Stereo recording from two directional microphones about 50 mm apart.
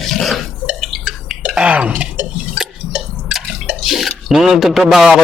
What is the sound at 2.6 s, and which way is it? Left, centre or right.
Drip, centre.